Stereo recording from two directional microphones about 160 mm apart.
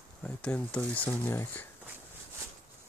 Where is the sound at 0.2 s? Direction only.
10° left (ahead or behind).